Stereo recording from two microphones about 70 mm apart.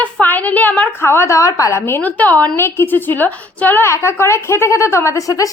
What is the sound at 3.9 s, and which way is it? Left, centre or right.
A woman's voice, left.